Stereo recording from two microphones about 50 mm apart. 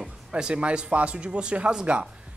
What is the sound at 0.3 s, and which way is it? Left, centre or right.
A man's voice, centre.